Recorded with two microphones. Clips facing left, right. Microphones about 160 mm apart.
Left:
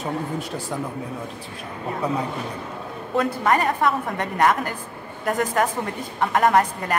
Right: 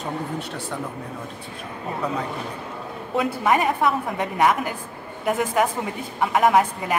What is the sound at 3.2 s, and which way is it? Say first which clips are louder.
A woman's voice: even; 5° right (ahead or behind).